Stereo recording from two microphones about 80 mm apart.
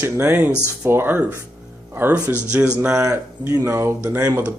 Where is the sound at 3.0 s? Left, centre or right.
Right.